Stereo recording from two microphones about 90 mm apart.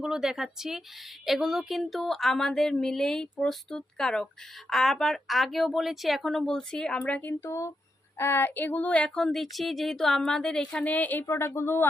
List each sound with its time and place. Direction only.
0.0 s speech: 5° right (ahead or behind)
7.0 s speech: 20° left (ahead or behind)